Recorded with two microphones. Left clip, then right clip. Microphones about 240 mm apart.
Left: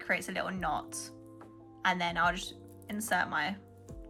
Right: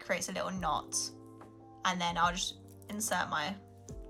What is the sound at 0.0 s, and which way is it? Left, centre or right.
A woman's voice, centre.